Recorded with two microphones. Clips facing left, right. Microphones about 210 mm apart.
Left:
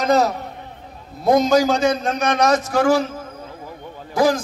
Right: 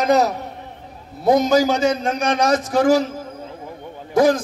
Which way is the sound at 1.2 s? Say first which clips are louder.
Even; centre (ahead or behind).